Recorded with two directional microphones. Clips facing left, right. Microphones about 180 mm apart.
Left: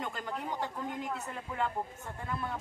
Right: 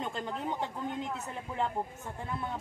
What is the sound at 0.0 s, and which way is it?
Speech, 25° right (ahead or behind).